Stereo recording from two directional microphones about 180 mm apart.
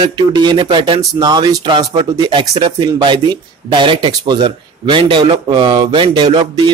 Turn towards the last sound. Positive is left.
turn(degrees=-30)  # may be behind; listen again after turning